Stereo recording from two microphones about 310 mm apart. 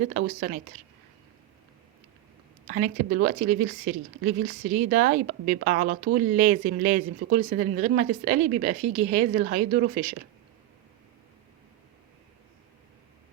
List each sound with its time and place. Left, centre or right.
0.1 s speech: right
2.6 s a woman's voice: right